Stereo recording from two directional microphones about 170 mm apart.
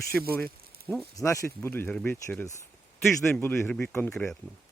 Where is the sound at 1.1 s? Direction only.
20° left (ahead or behind).